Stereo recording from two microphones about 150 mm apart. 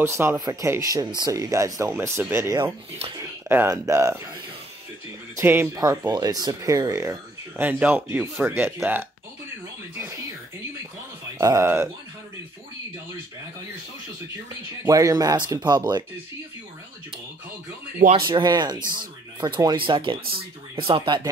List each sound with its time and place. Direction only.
0.0 s speech: 15° right (ahead or behind)
5.3 s speech: 15° right (ahead or behind)
11.3 s speech: 20° right (ahead or behind)
14.9 s speech: 20° right (ahead or behind)
18.2 s speech: 25° right (ahead or behind)